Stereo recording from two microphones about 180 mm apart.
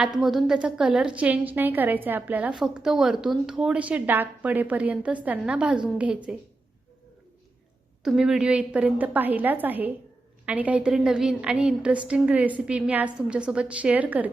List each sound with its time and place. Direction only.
0.0 s a woman's voice: 5° right (ahead or behind)
8.0 s a woman's voice: centre (ahead or behind)